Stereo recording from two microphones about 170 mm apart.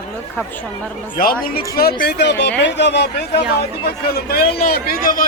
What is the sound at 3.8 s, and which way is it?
Speech, 65° left (ahead or behind).